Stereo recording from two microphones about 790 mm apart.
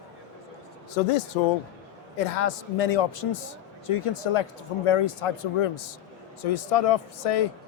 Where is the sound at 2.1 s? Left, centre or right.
Left.